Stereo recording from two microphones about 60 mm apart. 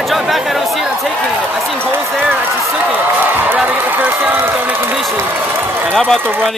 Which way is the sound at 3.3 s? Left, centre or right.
Right.